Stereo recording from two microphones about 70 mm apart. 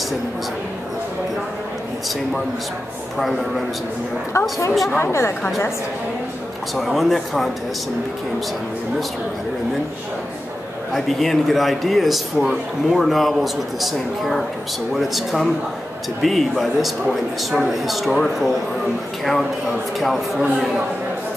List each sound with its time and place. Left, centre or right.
3.2 s a man's voice: centre
4.9 s speech: left
6.7 s a man's voice: centre
10.9 s a man's voice: centre
20.0 s a man's voice: centre